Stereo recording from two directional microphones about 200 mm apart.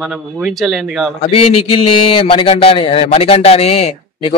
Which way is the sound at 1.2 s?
30° left (ahead or behind).